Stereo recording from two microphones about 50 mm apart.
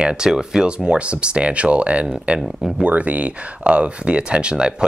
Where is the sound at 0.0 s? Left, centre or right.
Centre.